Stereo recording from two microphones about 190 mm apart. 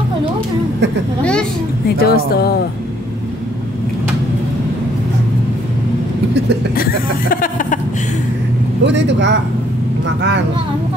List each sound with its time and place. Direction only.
1.9 s speech: 55° left (ahead or behind)
6.7 s speech: 50° left (ahead or behind)
8.8 s speech: 70° right (ahead or behind)